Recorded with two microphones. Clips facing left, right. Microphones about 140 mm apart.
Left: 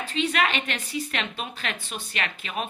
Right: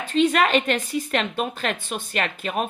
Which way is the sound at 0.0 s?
50° right (ahead or behind).